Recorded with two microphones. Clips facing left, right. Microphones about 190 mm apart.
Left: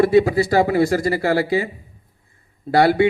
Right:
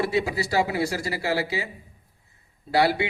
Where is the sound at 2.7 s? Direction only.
50° left (ahead or behind).